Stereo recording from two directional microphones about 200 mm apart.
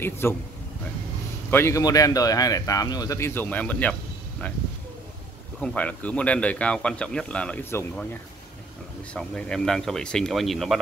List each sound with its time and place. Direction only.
0.0 s speech: 10° left (ahead or behind)
1.5 s speech: 15° left (ahead or behind)
5.6 s speech: 5° left (ahead or behind)